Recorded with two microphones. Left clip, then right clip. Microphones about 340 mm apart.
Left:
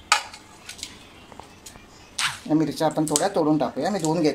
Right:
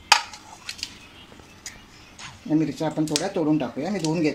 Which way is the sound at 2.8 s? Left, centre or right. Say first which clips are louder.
Left 3 dB; left.